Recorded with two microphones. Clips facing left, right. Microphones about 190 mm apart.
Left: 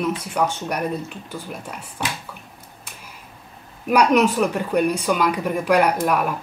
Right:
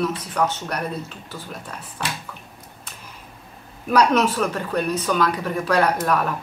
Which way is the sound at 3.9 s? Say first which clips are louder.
Left 2 dB; 15° left (ahead or behind).